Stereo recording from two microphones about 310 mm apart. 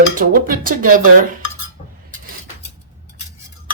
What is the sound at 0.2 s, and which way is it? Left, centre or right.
Music, right.